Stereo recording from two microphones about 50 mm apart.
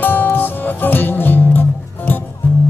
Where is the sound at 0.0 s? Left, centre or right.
Left.